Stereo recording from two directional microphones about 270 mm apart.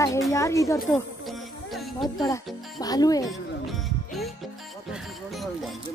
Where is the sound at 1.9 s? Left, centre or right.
Centre.